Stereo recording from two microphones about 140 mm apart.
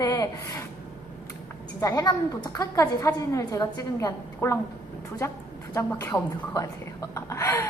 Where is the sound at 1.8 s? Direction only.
25° left (ahead or behind).